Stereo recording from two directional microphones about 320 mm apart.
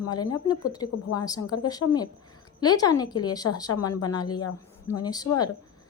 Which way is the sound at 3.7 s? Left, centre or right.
Left.